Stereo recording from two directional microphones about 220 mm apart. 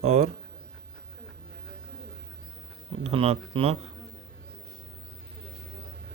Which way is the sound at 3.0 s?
30° right (ahead or behind).